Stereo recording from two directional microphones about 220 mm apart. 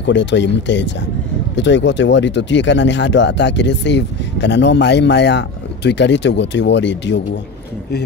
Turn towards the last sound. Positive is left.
turn(degrees=55)  # may be behind; listen again after turning